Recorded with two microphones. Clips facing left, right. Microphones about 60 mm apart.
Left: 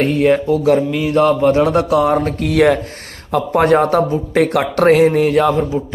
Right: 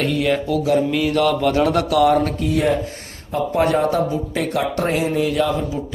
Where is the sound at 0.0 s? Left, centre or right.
Left.